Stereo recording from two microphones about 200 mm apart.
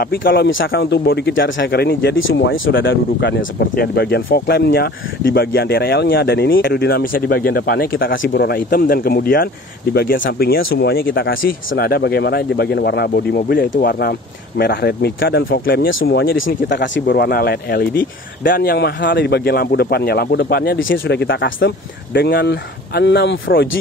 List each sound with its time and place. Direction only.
0.0 s speech: 50° left (ahead or behind)
2.1 s speech: 70° left (ahead or behind)
2.8 s speech: 50° left (ahead or behind)
17.0 s speech: 50° left (ahead or behind)